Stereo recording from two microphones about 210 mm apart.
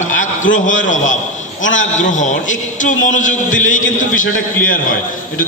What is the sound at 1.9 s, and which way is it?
A man's voice, 35° left (ahead or behind).